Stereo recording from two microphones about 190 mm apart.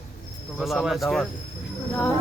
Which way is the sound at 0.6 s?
Centre (ahead or behind).